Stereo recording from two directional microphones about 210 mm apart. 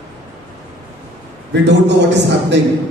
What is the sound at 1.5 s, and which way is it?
A man's voice, 55° right (ahead or behind).